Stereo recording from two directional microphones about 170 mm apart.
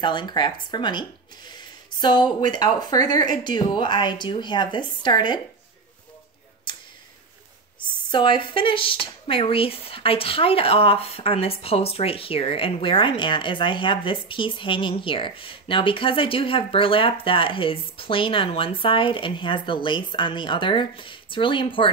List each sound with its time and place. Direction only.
0.0 s speech: 25° left (ahead or behind)
8.1 s speech: 30° left (ahead or behind)